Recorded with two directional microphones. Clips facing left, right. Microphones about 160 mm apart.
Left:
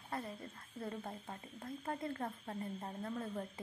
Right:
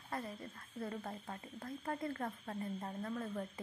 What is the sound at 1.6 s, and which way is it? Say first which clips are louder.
Speech: right 1 dB; 20° left (ahead or behind).